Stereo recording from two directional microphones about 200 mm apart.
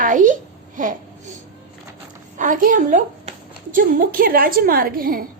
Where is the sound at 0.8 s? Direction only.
40° right (ahead or behind).